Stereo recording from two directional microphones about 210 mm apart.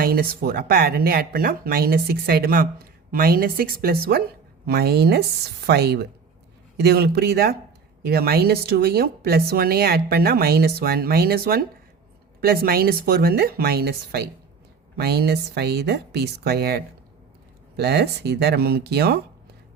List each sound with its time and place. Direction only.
0.0 s speech: 45° right (ahead or behind)